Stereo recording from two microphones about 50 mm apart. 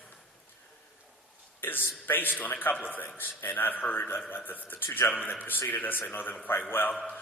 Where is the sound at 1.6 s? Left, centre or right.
Left.